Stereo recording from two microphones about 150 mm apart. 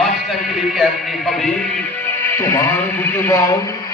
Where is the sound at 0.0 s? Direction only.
Centre (ahead or behind).